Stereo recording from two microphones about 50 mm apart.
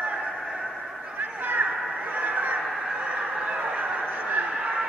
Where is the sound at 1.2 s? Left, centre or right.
Right.